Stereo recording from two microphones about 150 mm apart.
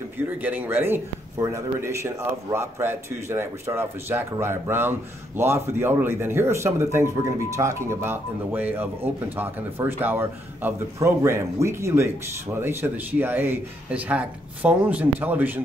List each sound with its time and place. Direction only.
0.4 s a man's voice: 10° right (ahead or behind)